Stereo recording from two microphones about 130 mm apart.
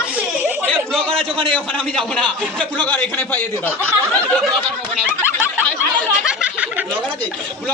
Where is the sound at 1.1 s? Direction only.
45° right (ahead or behind).